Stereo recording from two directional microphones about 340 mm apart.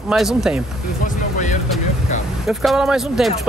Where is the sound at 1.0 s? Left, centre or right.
Left.